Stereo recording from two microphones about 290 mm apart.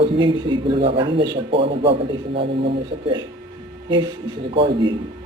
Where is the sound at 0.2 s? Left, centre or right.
Centre.